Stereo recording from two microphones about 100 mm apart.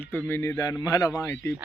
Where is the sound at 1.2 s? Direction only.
30° left (ahead or behind).